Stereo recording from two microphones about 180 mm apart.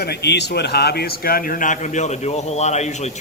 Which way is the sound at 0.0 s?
65° left (ahead or behind).